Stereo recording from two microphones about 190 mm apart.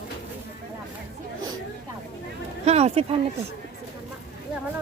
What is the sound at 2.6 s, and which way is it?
Speech, 35° right (ahead or behind).